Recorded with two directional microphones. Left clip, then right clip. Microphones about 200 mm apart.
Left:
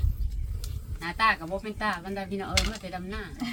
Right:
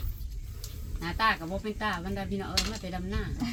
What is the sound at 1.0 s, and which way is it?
Speech, 5° right (ahead or behind).